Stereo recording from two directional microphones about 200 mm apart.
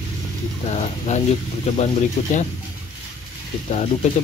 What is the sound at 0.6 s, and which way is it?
Speech, 35° left (ahead or behind).